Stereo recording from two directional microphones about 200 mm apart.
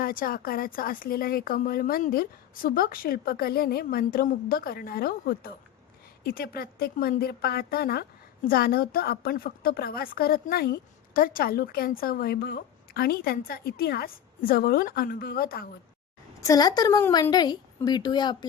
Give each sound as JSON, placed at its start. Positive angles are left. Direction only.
{"t": 0.0, "sound": "a woman's voice", "side_deg": 45}
{"t": 16.4, "sound": "a woman's voice", "side_deg": 20}